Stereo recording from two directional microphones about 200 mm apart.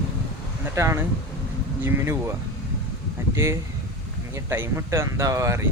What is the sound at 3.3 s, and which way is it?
Speech, 15° right (ahead or behind).